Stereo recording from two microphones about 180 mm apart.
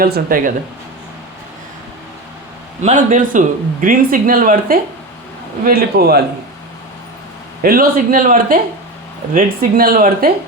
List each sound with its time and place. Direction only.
0.0 s speech: 55° right (ahead or behind)
2.8 s a man's voice: 45° right (ahead or behind)
7.6 s speech: 55° right (ahead or behind)